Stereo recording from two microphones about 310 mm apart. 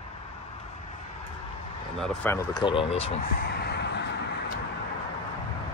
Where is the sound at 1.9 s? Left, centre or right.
Centre; by 4.4 s left.